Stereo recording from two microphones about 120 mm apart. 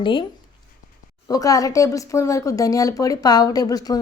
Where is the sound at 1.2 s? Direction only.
30° left (ahead or behind).